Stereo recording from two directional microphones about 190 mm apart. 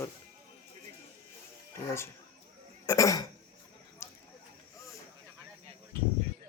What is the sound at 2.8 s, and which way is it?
Throat clearing, 15° left (ahead or behind).